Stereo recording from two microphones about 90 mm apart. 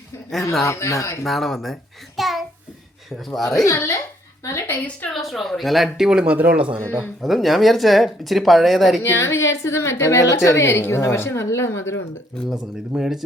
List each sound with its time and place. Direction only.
0.6 s a woman's voice: 35° left (ahead or behind)
1.2 s a child's voice: 5° left (ahead or behind)
3.6 s a woman's voice: 30° left (ahead or behind)
5.1 s speech: centre (ahead or behind); by 6.7 s 15° right (ahead or behind)
7.2 s speech: centre (ahead or behind)
9.0 s a woman's voice: 30° left (ahead or behind)
12.9 s speech: 5° right (ahead or behind)